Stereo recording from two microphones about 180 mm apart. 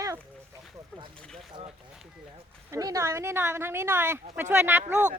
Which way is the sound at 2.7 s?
20° right (ahead or behind).